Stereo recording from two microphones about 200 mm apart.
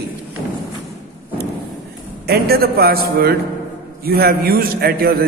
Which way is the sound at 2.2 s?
50° right (ahead or behind).